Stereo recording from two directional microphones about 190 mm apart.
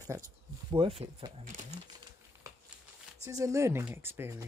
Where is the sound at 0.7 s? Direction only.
30° right (ahead or behind).